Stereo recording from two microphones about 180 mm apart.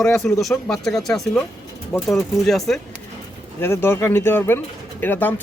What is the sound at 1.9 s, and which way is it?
Speech, 15° left (ahead or behind).